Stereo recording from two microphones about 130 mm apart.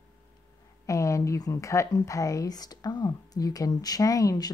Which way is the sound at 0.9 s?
25° left (ahead or behind).